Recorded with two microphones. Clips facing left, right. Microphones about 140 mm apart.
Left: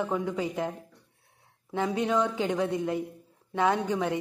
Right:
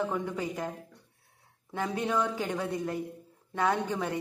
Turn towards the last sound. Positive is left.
turn(degrees=15)  # may be behind; listen again after turning